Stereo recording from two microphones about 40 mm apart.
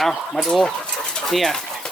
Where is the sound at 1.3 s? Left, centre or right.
Centre.